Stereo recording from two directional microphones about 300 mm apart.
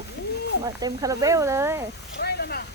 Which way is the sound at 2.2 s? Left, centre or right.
Left.